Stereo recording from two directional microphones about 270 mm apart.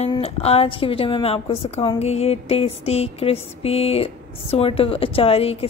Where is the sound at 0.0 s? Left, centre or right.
Left.